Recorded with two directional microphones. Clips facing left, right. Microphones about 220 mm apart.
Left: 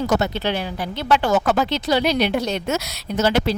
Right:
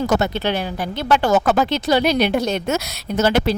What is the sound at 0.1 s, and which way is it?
Speech, 55° right (ahead or behind).